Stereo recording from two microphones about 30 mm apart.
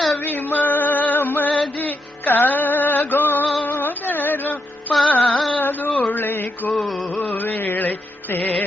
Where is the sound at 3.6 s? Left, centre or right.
Left.